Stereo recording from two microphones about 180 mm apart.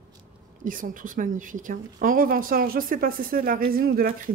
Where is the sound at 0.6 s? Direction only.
50° right (ahead or behind).